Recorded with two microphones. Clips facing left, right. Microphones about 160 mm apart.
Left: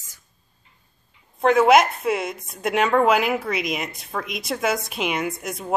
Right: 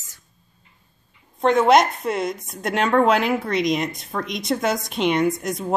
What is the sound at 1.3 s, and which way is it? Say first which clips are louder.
Speech: even; 5° left (ahead or behind).